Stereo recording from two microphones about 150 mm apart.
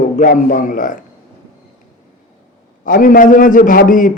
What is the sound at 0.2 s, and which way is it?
Speech, 60° left (ahead or behind).